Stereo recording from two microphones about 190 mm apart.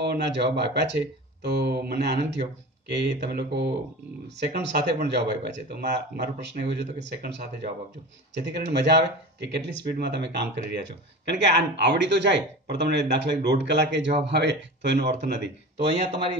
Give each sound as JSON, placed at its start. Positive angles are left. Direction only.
{"t": 0.0, "sound": "speech", "side_deg": -60}